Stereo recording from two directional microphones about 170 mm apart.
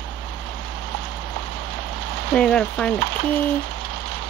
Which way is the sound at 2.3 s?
5° left (ahead or behind).